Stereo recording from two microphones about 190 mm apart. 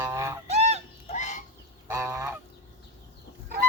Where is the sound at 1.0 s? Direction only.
40° left (ahead or behind).